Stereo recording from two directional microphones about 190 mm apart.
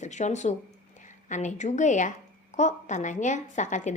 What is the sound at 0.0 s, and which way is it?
A woman's voice, 40° left (ahead or behind).